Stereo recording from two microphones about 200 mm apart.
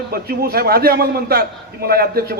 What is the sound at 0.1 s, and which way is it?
A man's voice, 50° right (ahead or behind).